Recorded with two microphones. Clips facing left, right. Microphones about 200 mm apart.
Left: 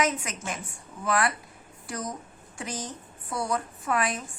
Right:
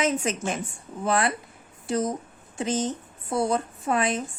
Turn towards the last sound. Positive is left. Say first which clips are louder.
# right 3 dB
turn(degrees=-25)  # may be behind; listen again after turning